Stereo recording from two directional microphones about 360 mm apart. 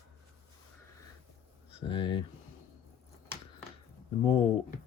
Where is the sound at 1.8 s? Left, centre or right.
Centre.